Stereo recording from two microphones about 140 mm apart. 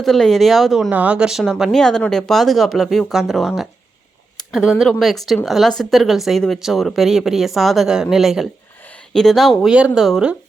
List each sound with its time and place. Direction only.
0.0 s speech: centre (ahead or behind)